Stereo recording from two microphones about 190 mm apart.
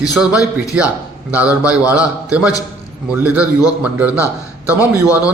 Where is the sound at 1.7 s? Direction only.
5° right (ahead or behind).